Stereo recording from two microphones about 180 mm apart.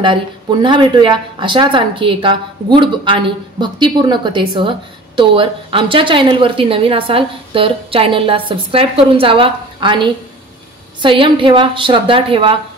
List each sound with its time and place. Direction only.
0.0 s speech: 25° right (ahead or behind)